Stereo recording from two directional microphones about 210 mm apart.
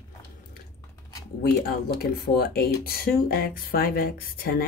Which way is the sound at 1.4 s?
45° left (ahead or behind).